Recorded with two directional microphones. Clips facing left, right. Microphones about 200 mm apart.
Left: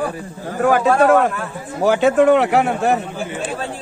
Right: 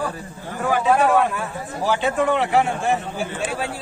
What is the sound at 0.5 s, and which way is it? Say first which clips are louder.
A man's voice: left 4 dB; 50° left (ahead or behind).